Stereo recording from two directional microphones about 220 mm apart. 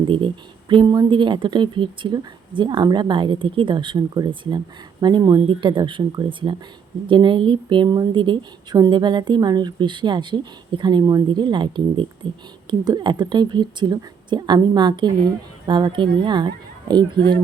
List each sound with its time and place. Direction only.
0.7 s speech: 20° right (ahead or behind)